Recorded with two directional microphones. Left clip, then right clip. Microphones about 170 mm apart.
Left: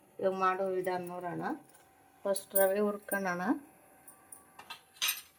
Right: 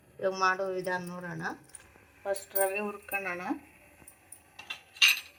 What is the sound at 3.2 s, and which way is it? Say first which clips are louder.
Speech: even; 90° left.